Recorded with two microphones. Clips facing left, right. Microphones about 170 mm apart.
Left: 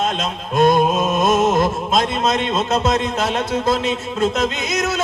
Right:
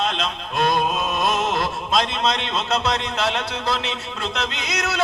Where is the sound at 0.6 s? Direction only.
20° left (ahead or behind).